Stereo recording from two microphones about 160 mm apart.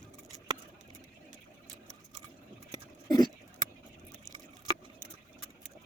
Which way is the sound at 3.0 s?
25° left (ahead or behind).